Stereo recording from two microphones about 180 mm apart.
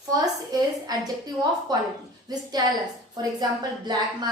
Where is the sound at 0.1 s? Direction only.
20° right (ahead or behind).